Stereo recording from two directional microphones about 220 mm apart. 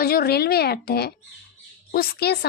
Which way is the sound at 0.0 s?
45° left (ahead or behind).